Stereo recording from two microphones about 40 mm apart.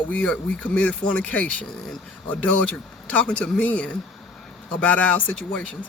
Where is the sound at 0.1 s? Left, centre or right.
Left.